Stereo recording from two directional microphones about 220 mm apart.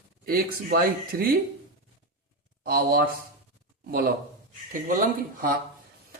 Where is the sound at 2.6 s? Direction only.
45° right (ahead or behind).